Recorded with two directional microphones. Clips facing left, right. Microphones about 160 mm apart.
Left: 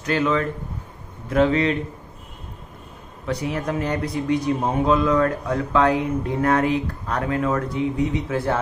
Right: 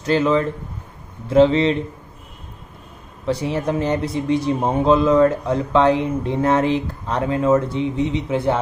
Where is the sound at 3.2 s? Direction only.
30° right (ahead or behind).